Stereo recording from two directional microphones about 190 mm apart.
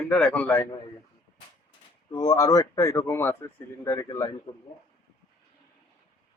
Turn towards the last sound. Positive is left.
turn(degrees=20)  # may be behind; listen again after turning